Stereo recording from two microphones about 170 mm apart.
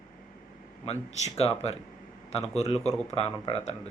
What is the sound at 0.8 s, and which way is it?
Speech, 40° left (ahead or behind).